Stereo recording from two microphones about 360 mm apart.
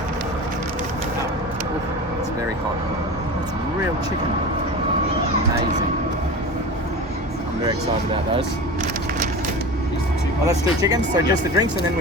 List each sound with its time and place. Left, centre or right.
10.8 s speech: centre